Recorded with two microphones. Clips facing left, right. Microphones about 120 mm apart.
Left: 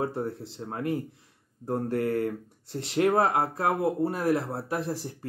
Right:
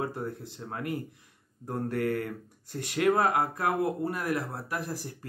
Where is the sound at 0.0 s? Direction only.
25° left (ahead or behind).